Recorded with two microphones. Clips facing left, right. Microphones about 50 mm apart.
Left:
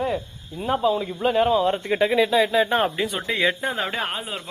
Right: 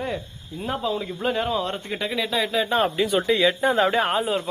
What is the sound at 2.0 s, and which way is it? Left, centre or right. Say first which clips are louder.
Speech: left 8 dB; centre.